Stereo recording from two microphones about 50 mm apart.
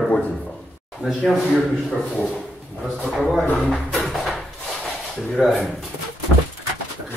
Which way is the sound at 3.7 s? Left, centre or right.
Centre.